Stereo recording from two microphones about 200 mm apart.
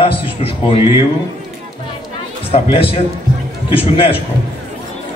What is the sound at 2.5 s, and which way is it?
A man's voice, 30° left (ahead or behind).